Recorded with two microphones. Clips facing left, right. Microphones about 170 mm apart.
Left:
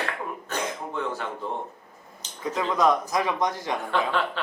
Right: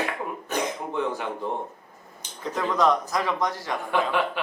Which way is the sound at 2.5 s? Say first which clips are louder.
Even; 15° left (ahead or behind).